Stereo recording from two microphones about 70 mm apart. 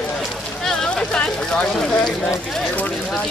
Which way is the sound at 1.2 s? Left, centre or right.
Centre.